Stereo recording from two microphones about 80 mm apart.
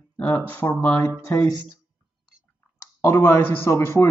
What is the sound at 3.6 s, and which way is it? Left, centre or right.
Speech, left.